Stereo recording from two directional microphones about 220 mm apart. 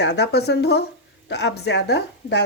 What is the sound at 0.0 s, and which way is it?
A woman's voice, 50° left (ahead or behind).